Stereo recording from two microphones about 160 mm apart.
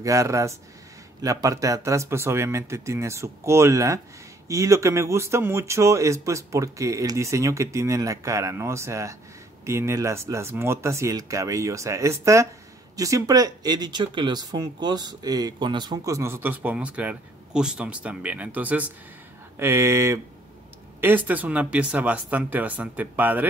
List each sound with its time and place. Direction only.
0.0 s speech: 20° right (ahead or behind)